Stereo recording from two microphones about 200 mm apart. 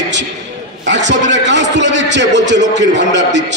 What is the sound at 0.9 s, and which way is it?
A man's voice, 65° right (ahead or behind).